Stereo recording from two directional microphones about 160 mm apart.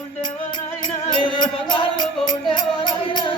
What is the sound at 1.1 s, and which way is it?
Music, 30° left (ahead or behind).